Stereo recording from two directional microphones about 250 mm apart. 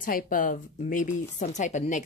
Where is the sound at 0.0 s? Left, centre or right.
Left.